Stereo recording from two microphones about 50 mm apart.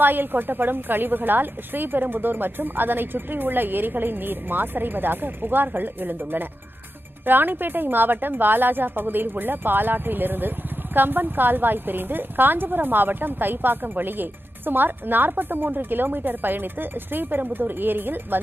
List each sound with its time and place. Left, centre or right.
0.0 s a woman's voice: right